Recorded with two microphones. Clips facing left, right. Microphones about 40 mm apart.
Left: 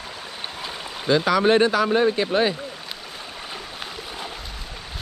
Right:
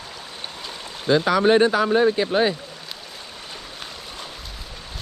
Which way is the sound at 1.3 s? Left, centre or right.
Left.